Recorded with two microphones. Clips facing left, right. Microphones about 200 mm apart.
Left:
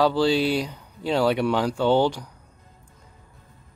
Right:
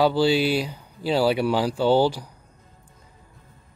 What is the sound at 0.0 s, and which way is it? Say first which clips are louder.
Speech: right 1 dB; 5° right (ahead or behind).